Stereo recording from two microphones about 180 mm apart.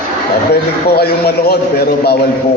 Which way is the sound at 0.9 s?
60° left (ahead or behind).